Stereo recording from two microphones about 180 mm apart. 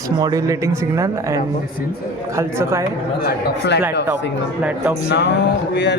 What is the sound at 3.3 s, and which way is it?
Speech, 60° left (ahead or behind).